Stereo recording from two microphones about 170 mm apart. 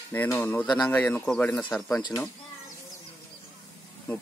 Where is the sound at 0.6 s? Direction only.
25° left (ahead or behind).